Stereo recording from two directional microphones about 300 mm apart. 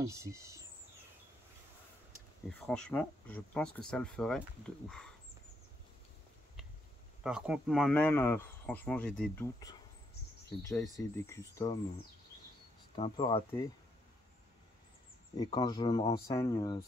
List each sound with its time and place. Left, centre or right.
0.0 s speech: centre
2.6 s speech: centre
7.2 s speech: centre
12.9 s speech: centre
15.3 s speech: centre